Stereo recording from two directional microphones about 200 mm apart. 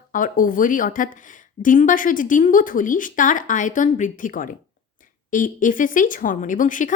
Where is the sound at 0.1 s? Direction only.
45° left (ahead or behind).